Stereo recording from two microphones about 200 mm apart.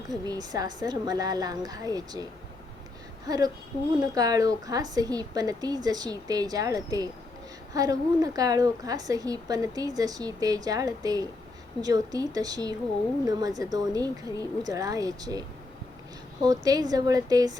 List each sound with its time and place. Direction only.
0.1 s a woman's voice: 20° right (ahead or behind)
3.2 s a woman's voice: 20° right (ahead or behind)